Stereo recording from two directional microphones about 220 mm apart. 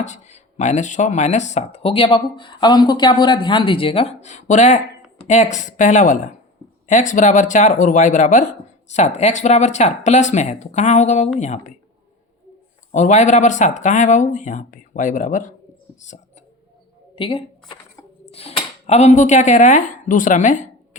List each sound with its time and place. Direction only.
0.0 s speech: 30° left (ahead or behind)
12.9 s speech: 35° left (ahead or behind)
17.2 s speech: 20° left (ahead or behind)